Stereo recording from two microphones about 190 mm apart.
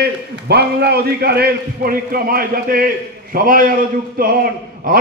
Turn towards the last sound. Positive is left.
turn(degrees=-50)  # may be behind; listen again after turning